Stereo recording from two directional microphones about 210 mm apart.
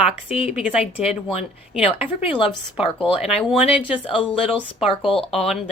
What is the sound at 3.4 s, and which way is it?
Speech, 5° right (ahead or behind).